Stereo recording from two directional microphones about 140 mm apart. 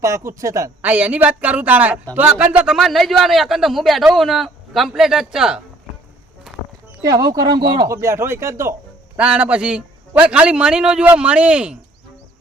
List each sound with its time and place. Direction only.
0.0 s speech: 20° right (ahead or behind)
0.8 s a man's voice: 10° right (ahead or behind)
7.0 s speech: 25° right (ahead or behind)
9.1 s a man's voice: 10° right (ahead or behind)